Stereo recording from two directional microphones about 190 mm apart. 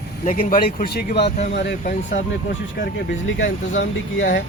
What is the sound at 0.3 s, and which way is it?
Speech, 45° left (ahead or behind).